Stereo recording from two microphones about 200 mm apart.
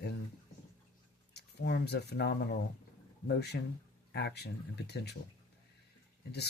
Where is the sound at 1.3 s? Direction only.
55° left (ahead or behind).